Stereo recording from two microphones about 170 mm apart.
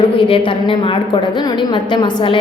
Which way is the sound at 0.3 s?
30° left (ahead or behind).